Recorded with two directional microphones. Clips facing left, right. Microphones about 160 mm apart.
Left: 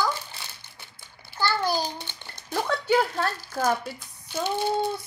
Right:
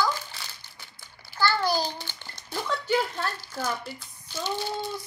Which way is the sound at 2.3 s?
55° left (ahead or behind).